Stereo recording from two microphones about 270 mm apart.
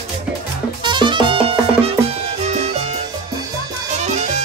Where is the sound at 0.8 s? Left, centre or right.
Centre.